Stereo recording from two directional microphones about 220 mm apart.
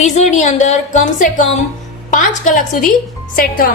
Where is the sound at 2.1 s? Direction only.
35° left (ahead or behind).